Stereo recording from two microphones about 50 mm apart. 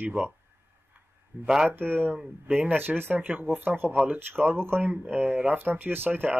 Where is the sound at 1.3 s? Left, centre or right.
Right.